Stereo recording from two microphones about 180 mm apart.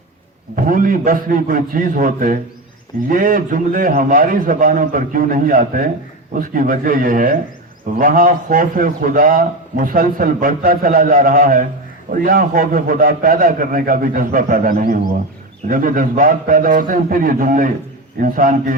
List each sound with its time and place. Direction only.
0.5 s a man's voice: 50° right (ahead or behind)